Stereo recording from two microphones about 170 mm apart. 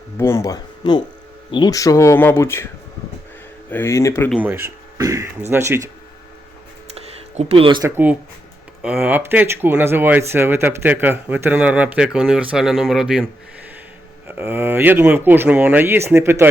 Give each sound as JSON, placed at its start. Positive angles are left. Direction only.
{"t": 0.2, "sound": "speech", "side_deg": 15}
{"t": 3.7, "sound": "speech", "side_deg": 15}
{"t": 4.3, "sound": "speech", "side_deg": -10}
{"t": 6.9, "sound": "a sound", "side_deg": -35}
{"t": 7.8, "sound": "speech", "side_deg": -15}
{"t": 14.3, "sound": "speech", "side_deg": -10}